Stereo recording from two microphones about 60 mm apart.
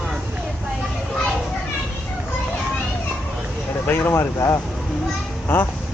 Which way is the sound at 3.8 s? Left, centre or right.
Left.